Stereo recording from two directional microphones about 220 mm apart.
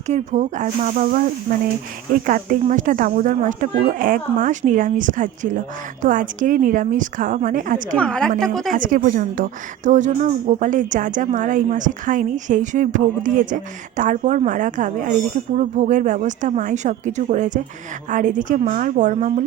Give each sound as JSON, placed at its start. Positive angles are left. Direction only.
{"t": 0.1, "sound": "a woman's voice", "side_deg": -35}
{"t": 2.2, "sound": "a woman's voice", "side_deg": -40}
{"t": 7.9, "sound": "a woman's voice", "side_deg": 5}
{"t": 8.7, "sound": "a woman's voice", "side_deg": -35}